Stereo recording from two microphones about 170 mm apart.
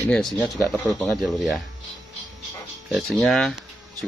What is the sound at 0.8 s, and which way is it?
Speech, centre (ahead or behind).